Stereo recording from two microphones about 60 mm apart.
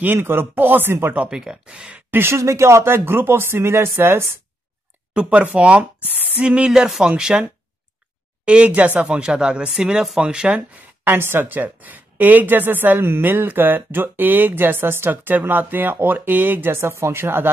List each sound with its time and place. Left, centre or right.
0.0 s a woman's voice: right
1.1 s speech: right
2.0 s speech: right
5.1 s speech: right
8.5 s speech: centre
11.1 s a woman's voice: right
16.7 s speech: right